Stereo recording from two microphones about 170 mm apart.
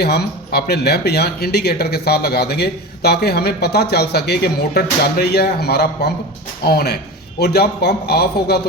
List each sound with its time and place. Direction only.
0.0 s speech: 70° left (ahead or behind)